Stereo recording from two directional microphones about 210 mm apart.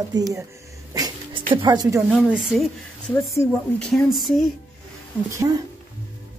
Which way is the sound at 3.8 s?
Centre (ahead or behind).